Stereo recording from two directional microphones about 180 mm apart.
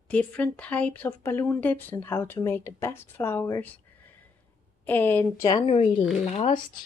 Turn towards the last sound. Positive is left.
turn(degrees=40)  # may be behind; listen again after turning